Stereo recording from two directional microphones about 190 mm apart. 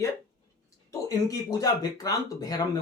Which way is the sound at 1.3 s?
20° left (ahead or behind).